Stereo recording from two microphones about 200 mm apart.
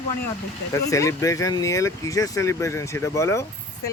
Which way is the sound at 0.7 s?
15° left (ahead or behind).